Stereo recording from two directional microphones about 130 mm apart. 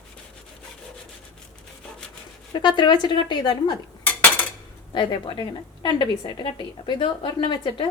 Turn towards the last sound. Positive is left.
turn(degrees=35)  # may be behind; listen again after turning